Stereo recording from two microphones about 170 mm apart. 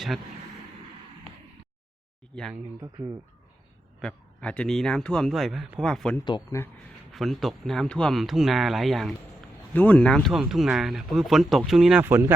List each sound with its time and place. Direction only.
2.3 s a man's voice: centre (ahead or behind)
2.8 s speech: 20° right (ahead or behind)
4.0 s a man's voice: 5° left (ahead or behind)
6.2 s speech: 25° left (ahead or behind)
7.1 s a man's voice: centre (ahead or behind)
12.0 s speech: 15° right (ahead or behind)